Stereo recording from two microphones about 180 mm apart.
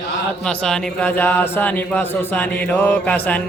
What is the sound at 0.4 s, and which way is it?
Speech, 5° left (ahead or behind).